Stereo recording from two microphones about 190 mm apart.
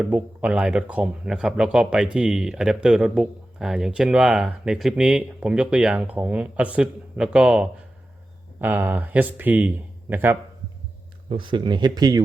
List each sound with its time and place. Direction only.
0.0 s speech: 5° right (ahead or behind)
11.3 s speech: 25° right (ahead or behind)